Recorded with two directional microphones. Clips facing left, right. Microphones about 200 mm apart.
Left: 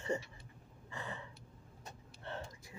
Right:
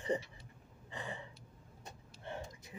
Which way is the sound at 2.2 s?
15° right (ahead or behind).